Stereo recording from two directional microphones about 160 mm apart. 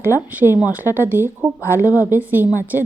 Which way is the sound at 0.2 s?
10° right (ahead or behind).